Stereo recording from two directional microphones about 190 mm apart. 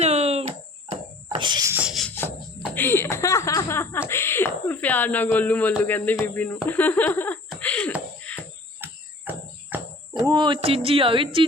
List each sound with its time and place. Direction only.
0.0 s a sound: 35° right (ahead or behind)
1.7 s music: 5° right (ahead or behind)
2.7 s speech: 10° left (ahead or behind)
6.7 s laughter: 10° left (ahead or behind)
8.3 s cricket: 5° left (ahead or behind)
8.8 s cricket: 10° right (ahead or behind)
10.2 s speech: 25° right (ahead or behind)